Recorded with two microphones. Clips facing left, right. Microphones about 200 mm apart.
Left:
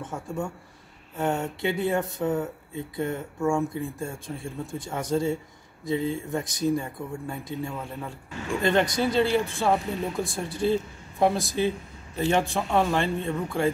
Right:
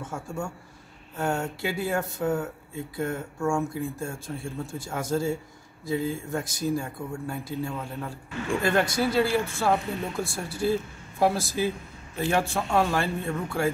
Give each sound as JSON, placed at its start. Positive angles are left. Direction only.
{"t": 0.0, "sound": "speech", "side_deg": 0}
{"t": 10.2, "sound": "speech", "side_deg": 20}
{"t": 10.7, "sound": "speech", "side_deg": -5}